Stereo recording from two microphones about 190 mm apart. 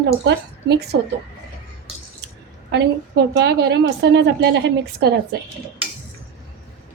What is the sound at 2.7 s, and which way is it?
A woman's voice, 60° right (ahead or behind).